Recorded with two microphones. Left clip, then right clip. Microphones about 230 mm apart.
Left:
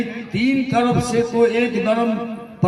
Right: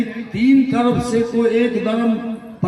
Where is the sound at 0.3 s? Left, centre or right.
Left.